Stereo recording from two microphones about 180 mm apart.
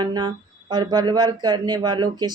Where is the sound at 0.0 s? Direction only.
25° right (ahead or behind).